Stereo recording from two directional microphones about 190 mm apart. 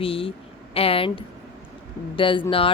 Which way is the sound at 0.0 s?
30° left (ahead or behind).